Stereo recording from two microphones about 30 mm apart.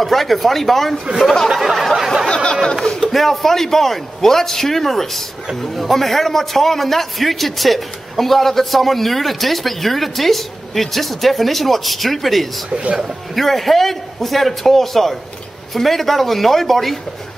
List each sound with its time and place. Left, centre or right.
0.0 s a man's voice: centre
1.7 s a man's voice: centre
2.2 s a sound: left
2.8 s a man's voice: centre
12.6 s a man's voice: right
13.3 s a man's voice: centre